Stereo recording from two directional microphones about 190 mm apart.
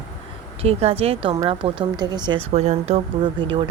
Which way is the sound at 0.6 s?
30° right (ahead or behind).